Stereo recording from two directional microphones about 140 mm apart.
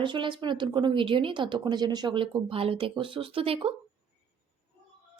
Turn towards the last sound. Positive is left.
turn(degrees=-40)  # may be behind; listen again after turning